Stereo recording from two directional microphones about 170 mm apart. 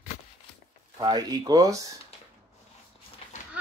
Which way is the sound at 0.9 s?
25° right (ahead or behind).